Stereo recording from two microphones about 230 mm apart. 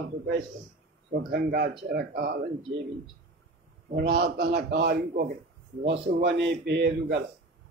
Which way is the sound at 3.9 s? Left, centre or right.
Right.